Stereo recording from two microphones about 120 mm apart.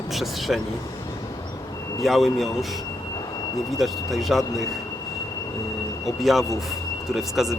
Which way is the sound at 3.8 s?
Centre (ahead or behind).